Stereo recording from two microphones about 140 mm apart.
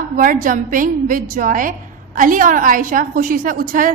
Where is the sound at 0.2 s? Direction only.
75° right (ahead or behind).